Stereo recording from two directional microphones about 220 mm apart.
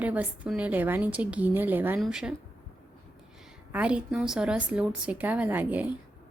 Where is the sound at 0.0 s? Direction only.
5° right (ahead or behind).